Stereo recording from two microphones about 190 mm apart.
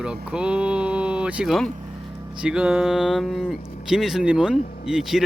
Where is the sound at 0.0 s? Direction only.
5° right (ahead or behind).